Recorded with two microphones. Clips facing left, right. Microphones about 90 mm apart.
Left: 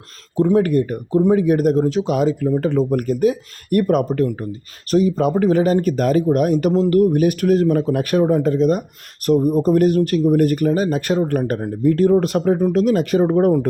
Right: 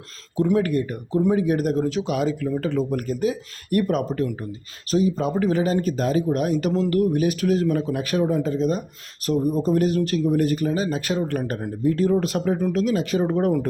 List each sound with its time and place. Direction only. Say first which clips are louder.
0.3 s a man's voice: left 5 dB; 35° left (ahead or behind)
2.7 s a man's voice: left 6 dB; 45° left (ahead or behind)
5.3 s a man's voice: left 5 dB; 40° left (ahead or behind)
6.7 s a man's voice: left 6 dB; 35° left (ahead or behind)